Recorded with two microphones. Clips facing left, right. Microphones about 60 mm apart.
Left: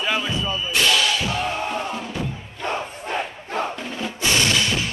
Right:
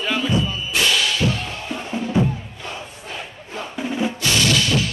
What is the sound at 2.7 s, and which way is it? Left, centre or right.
Crowd, left.